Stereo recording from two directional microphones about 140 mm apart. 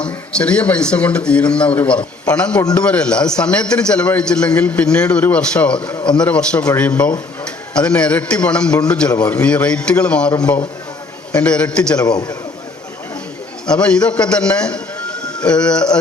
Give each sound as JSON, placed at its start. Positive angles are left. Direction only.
{"t": 0.0, "sound": "a man's voice", "side_deg": 10}
{"t": 7.9, "sound": "a man's voice", "side_deg": 10}
{"t": 9.0, "sound": "a man's voice", "side_deg": 30}
{"t": 9.3, "sound": "a man's voice", "side_deg": 10}
{"t": 11.9, "sound": "a man's voice", "side_deg": 30}
{"t": 13.7, "sound": "a man's voice", "side_deg": 5}